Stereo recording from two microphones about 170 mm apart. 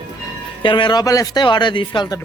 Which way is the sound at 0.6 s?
30° left (ahead or behind).